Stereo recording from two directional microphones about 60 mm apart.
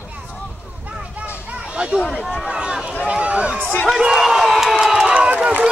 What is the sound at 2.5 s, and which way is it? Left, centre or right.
Speech, centre.